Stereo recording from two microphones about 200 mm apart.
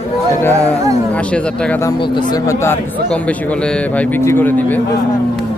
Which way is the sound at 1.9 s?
25° left (ahead or behind).